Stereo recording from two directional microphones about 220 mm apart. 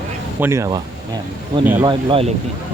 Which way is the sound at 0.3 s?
10° right (ahead or behind).